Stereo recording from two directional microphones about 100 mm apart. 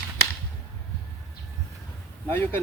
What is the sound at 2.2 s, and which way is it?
Speech, 20° left (ahead or behind).